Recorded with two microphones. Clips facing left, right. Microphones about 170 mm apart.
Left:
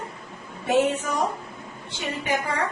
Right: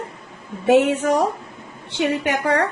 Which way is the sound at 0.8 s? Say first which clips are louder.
Right 6 dB; 80° right.